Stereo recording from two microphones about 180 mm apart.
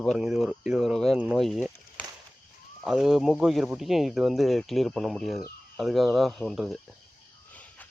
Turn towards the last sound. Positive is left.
turn(degrees=10)  # may be behind; listen again after turning